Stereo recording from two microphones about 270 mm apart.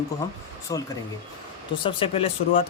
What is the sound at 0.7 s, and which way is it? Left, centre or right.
Speech, centre.